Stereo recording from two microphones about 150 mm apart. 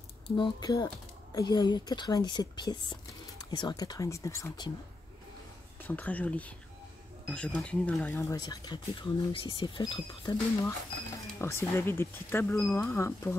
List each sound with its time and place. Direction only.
0.4 s speech: 30° left (ahead or behind)
5.9 s speech: 10° left (ahead or behind)
8.4 s speech: 25° left (ahead or behind)
11.3 s speech: 15° left (ahead or behind)